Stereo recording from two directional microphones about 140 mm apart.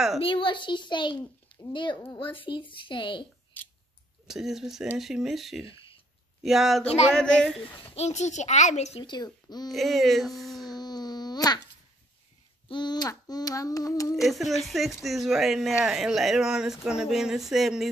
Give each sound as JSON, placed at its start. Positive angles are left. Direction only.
{"t": 0.2, "sound": "a child's voice", "side_deg": 40}
{"t": 4.3, "sound": "speech", "side_deg": -5}
{"t": 7.9, "sound": "a child's voice", "side_deg": 55}
{"t": 9.0, "sound": "a sound", "side_deg": 30}
{"t": 9.7, "sound": "speech", "side_deg": 0}
{"t": 10.7, "sound": "wail", "side_deg": 30}
{"t": 12.6, "sound": "a sound", "side_deg": 35}
{"t": 14.2, "sound": "speech", "side_deg": 0}